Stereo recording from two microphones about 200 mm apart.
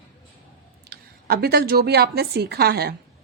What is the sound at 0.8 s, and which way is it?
A woman's voice, 50° right (ahead or behind).